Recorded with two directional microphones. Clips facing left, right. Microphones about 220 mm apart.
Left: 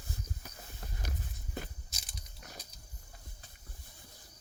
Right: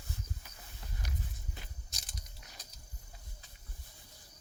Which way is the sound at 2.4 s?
55° left (ahead or behind).